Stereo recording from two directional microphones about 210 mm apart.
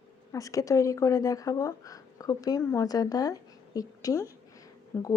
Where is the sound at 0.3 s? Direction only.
15° left (ahead or behind).